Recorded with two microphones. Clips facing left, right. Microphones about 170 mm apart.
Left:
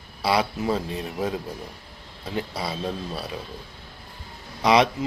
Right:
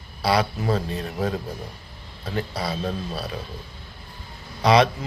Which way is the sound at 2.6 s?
20° left (ahead or behind).